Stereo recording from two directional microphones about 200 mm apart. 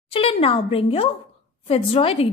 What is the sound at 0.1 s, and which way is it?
A woman's voice, 30° left (ahead or behind).